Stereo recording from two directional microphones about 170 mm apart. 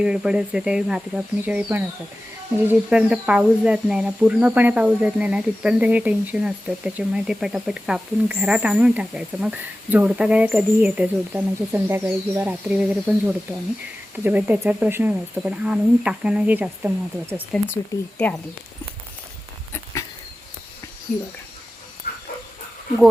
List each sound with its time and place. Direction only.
0.0 s speech: 5° right (ahead or behind)
17.9 s speech: 20° left (ahead or behind)
19.7 s a sound: 20° left (ahead or behind)
22.0 s dog: 60° left (ahead or behind)